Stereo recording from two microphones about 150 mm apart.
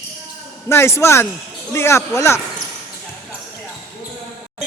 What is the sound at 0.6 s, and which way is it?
Speech, 15° left (ahead or behind).